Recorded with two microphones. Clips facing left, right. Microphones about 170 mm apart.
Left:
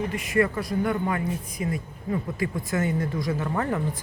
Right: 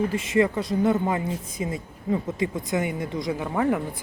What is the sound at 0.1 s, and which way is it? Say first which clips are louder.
Speech: right 2 dB; 25° right (ahead or behind).